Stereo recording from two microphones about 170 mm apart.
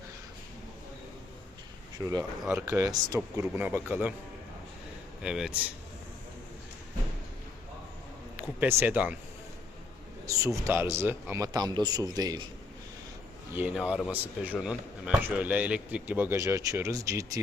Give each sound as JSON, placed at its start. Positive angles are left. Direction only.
{"t": 2.0, "sound": "a man's voice", "side_deg": -20}
{"t": 2.4, "sound": "speech", "side_deg": -5}
{"t": 2.8, "sound": "a man's voice", "side_deg": -20}
{"t": 5.2, "sound": "a man's voice", "side_deg": -5}
{"t": 8.6, "sound": "speech", "side_deg": -10}
{"t": 10.2, "sound": "a man's voice", "side_deg": -20}
{"t": 13.6, "sound": "speech", "side_deg": -10}